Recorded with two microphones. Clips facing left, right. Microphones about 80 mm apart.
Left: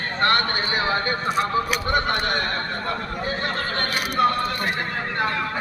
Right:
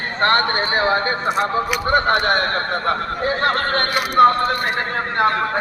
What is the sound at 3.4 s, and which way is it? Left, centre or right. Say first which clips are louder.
Speech: right 7 dB; right.